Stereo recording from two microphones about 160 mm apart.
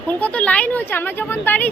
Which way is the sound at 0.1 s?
10° left (ahead or behind).